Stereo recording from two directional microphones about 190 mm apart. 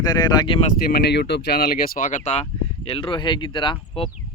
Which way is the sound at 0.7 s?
50° left (ahead or behind).